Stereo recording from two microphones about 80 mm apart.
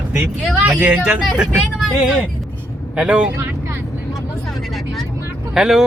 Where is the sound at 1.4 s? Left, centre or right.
Centre.